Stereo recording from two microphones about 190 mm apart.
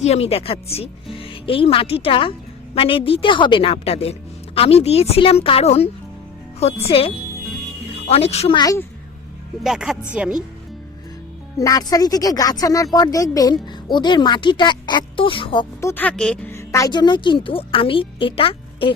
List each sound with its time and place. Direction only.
0.0 s a woman's voice: 35° left (ahead or behind)
8.6 s a woman's voice: 15° left (ahead or behind)
9.6 s speech: centre (ahead or behind)
11.5 s speech: 20° left (ahead or behind)
15.8 s speech: 10° left (ahead or behind); by 18.9 s 30° left (ahead or behind)